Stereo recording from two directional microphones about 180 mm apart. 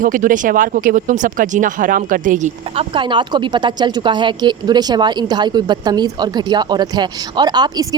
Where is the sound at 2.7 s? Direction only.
25° right (ahead or behind).